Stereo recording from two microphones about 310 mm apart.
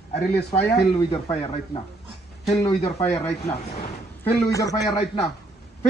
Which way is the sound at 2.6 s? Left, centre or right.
Centre.